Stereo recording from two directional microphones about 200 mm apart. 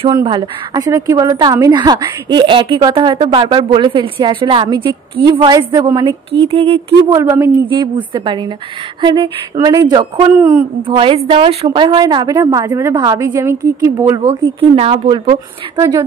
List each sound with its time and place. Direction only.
0.0 s a woman's voice: 25° right (ahead or behind)
7.2 s a woman's voice: 15° right (ahead or behind)